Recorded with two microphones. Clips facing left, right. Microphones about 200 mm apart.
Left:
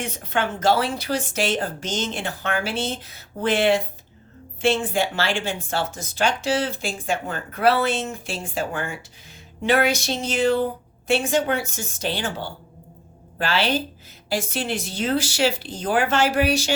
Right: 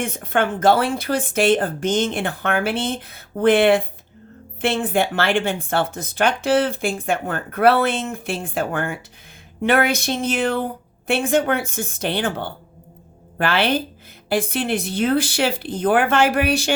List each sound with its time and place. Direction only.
0.0 s speech: 50° right (ahead or behind)